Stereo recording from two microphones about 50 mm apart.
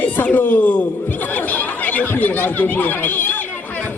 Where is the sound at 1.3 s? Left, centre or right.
Left.